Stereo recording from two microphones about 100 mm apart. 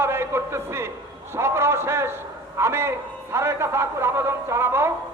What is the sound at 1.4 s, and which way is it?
A man's voice, 25° right (ahead or behind).